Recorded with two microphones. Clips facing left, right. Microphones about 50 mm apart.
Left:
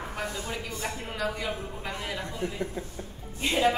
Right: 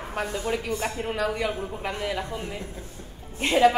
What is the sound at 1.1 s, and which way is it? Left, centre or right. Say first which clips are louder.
A woman's voice: right 3 dB; right.